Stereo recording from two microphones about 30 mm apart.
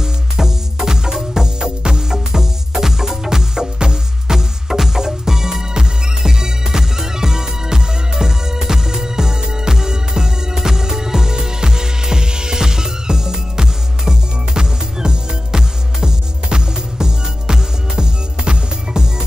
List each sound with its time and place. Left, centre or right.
0.0 s music: centre